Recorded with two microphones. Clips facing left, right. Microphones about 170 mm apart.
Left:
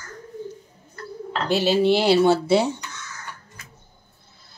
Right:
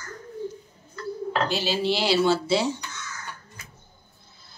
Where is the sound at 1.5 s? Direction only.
60° left (ahead or behind).